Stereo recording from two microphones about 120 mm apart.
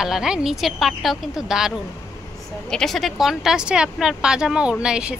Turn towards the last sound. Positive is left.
turn(degrees=-10)  # may be behind; listen again after turning